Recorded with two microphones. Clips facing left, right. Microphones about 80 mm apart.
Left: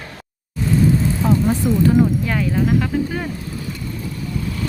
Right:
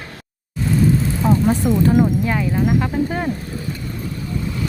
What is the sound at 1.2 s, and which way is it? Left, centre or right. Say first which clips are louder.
Speech: right 2 dB; centre.